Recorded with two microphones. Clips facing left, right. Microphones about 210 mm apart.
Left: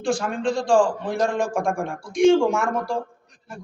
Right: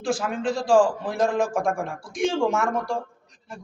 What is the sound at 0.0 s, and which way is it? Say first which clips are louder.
A man's voice: left 2 dB; 5° right (ahead or behind).